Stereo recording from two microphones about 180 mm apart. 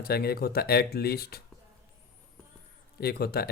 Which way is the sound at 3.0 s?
60° left (ahead or behind).